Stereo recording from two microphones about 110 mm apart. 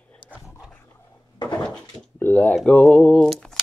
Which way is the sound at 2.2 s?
15° left (ahead or behind).